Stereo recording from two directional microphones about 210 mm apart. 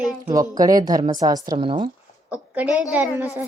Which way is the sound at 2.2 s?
5° right (ahead or behind).